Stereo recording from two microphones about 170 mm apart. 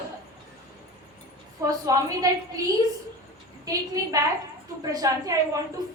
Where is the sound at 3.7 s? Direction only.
20° right (ahead or behind).